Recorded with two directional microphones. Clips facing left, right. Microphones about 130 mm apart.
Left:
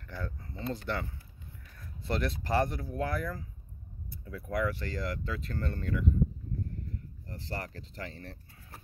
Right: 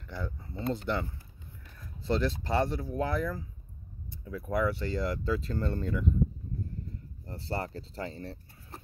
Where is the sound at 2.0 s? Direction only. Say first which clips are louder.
Right 4 dB; 25° right (ahead or behind).